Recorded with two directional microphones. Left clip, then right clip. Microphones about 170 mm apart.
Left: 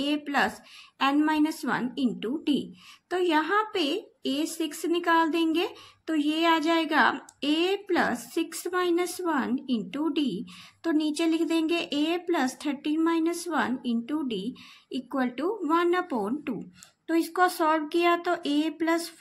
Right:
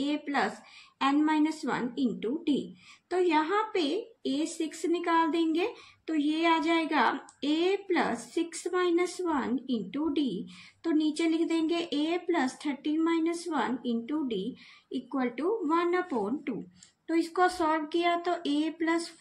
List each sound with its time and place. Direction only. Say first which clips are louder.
0.0 s a woman's voice: left 4 dB; 45° left (ahead or behind)